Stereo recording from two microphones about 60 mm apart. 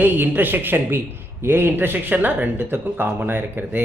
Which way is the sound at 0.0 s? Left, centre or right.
Right.